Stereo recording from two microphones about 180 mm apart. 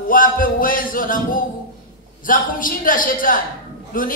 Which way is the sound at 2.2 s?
50° left (ahead or behind).